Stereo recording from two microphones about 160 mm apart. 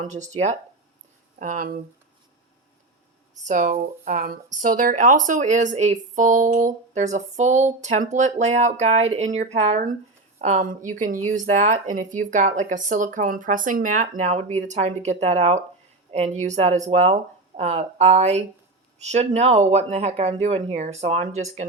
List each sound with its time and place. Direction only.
0.0 s speech: 50° right (ahead or behind)
3.3 s speech: 50° right (ahead or behind)